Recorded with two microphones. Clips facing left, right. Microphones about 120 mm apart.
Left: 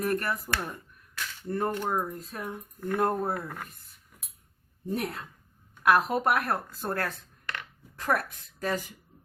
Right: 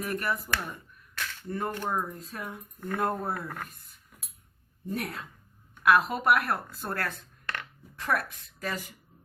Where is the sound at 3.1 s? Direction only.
10° left (ahead or behind).